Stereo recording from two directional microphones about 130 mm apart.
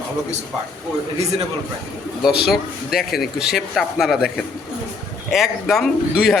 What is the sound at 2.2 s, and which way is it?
Speech, 5° right (ahead or behind).